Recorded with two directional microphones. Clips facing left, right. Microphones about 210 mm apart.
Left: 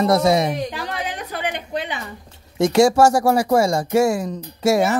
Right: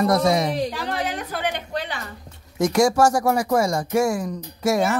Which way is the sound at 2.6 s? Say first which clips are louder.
Left 3 dB; 25° left (ahead or behind).